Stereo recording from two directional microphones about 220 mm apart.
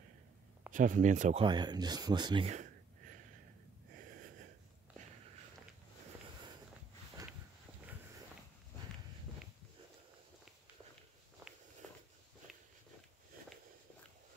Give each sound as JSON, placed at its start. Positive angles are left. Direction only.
{"t": 0.7, "sound": "speech", "side_deg": -35}
{"t": 1.4, "sound": "speech", "side_deg": -20}
{"t": 7.2, "sound": "a sound", "side_deg": -15}